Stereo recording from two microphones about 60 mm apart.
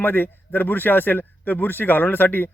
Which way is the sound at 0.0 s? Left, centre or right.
Left.